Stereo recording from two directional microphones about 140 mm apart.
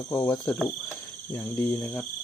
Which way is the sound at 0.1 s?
15° left (ahead or behind).